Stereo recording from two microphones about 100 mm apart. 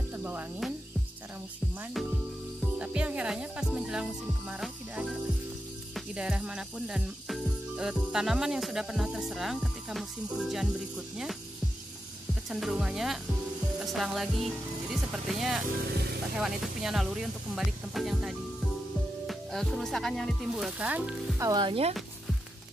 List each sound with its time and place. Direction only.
0.1 s cricket: 20° right (ahead or behind)
2.8 s speech: 10° right (ahead or behind)
6.1 s speech: 10° right (ahead or behind)
12.4 s speech: centre (ahead or behind)
20.8 s speech: 10° right (ahead or behind)
21.5 s speech: 55° right (ahead or behind)